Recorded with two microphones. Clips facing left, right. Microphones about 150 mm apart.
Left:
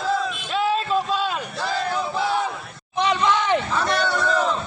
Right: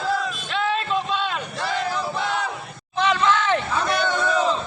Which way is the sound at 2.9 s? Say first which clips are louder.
Even; 15° left (ahead or behind).